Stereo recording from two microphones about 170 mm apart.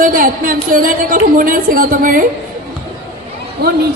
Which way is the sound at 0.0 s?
55° right (ahead or behind).